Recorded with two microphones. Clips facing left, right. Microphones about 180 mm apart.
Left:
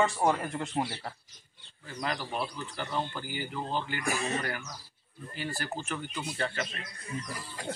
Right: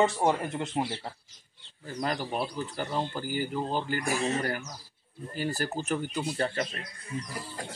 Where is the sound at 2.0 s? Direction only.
40° right (ahead or behind).